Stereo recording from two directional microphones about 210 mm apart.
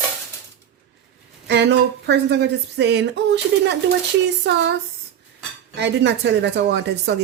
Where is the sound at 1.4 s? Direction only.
55° right (ahead or behind).